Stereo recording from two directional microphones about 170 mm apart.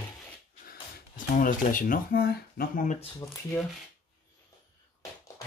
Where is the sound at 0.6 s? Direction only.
55° left (ahead or behind).